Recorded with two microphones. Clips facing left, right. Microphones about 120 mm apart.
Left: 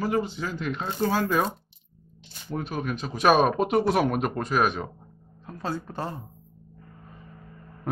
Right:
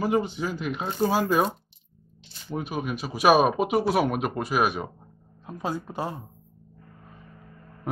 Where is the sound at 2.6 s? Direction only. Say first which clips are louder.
Even; 10° right (ahead or behind).